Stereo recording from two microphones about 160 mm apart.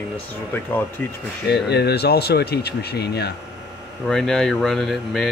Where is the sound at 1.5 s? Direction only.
90° left.